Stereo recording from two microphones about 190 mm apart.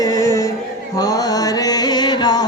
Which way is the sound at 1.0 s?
20° left (ahead or behind).